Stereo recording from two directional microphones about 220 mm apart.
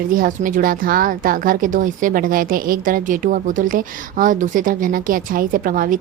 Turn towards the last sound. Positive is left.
turn(degrees=-40)  # may be behind; listen again after turning